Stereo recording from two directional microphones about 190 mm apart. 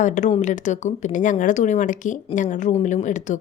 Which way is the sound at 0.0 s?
40° left (ahead or behind).